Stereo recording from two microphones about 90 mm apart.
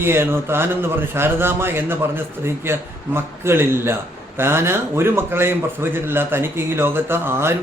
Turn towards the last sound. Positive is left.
turn(degrees=-25)  # may be behind; listen again after turning